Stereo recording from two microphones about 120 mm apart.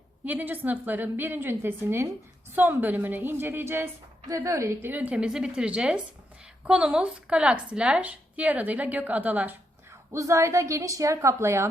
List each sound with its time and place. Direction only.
0.3 s a woman's voice: 15° right (ahead or behind)
10.1 s a woman's voice: 25° right (ahead or behind)